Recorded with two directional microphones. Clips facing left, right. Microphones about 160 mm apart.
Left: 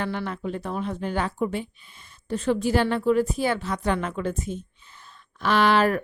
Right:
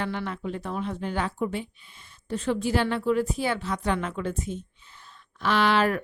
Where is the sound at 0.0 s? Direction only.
45° left (ahead or behind).